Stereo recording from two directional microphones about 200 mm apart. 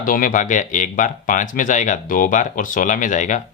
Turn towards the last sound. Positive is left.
turn(degrees=40)  # may be behind; listen again after turning